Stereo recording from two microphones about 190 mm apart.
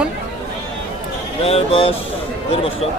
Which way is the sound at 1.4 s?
30° left (ahead or behind).